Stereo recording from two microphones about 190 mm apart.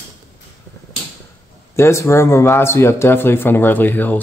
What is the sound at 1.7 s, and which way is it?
A man's voice, 15° left (ahead or behind).